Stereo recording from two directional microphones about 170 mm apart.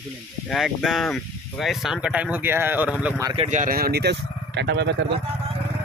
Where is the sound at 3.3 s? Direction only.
35° right (ahead or behind).